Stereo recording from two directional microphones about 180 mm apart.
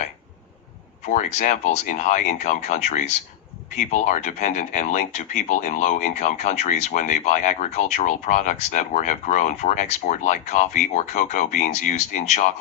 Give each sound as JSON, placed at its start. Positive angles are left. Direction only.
{"t": 1.0, "sound": "speech", "side_deg": 40}